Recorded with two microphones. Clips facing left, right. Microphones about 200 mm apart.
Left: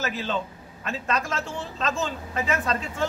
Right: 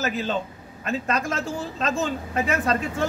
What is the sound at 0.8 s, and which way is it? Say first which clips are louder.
A man's voice: right 3 dB; 45° right (ahead or behind).